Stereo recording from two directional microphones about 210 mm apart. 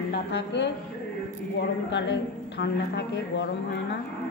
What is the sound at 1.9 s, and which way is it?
A woman's voice, 55° left (ahead or behind).